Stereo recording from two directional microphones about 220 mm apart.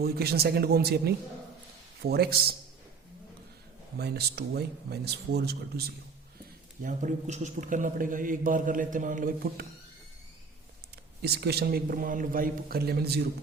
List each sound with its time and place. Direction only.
0.0 s a man's voice: 45° right (ahead or behind)
3.9 s a man's voice: 45° right (ahead or behind)
6.8 s a man's voice: 35° right (ahead or behind)
11.2 s a man's voice: 45° right (ahead or behind)